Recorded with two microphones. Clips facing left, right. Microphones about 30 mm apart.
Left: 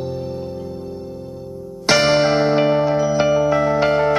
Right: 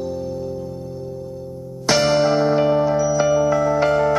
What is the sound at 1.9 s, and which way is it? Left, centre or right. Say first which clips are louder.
Music: left 2 dB; left.